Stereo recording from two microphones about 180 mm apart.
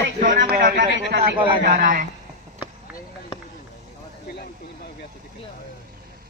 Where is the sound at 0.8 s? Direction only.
75° left (ahead or behind).